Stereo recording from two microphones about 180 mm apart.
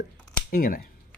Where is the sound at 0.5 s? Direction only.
50° left (ahead or behind).